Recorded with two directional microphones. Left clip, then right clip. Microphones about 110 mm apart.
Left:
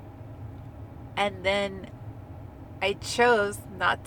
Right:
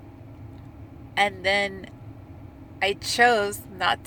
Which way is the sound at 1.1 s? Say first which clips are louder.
Right 4 dB; 15° left (ahead or behind).